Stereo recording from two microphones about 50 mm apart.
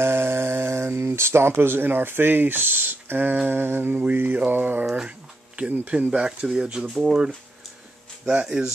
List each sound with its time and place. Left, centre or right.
0.0 s speech: right
4.1 s a sound: right
5.6 s speech: right
8.3 s speech: centre